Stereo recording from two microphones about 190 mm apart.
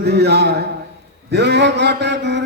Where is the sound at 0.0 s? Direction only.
60° right (ahead or behind).